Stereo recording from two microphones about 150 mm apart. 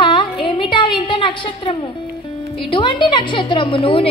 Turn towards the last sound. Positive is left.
turn(degrees=35)  # may be behind; listen again after turning